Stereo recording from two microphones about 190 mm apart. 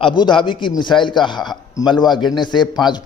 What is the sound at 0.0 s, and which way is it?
A man's voice, 25° left (ahead or behind).